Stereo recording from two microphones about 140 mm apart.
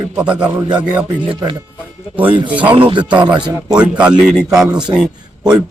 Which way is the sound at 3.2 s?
30° right (ahead or behind).